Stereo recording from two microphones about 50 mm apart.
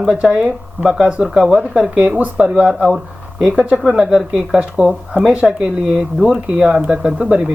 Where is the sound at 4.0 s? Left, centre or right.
Centre.